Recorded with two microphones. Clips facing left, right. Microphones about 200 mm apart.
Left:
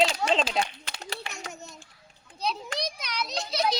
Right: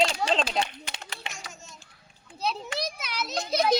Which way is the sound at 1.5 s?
65° left (ahead or behind).